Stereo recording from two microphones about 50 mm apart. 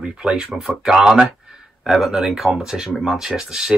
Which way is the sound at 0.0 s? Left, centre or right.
Centre.